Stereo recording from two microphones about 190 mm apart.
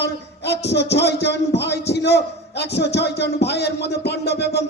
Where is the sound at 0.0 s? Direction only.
60° left (ahead or behind).